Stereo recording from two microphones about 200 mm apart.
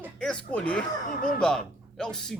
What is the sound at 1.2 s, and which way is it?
Speech, 45° left (ahead or behind).